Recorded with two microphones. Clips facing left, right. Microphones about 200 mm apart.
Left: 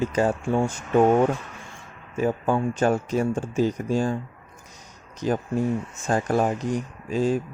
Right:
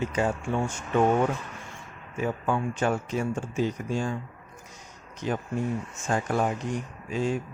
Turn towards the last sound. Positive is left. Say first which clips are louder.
# left 5 dB
turn(degrees=35)  # may be behind; listen again after turning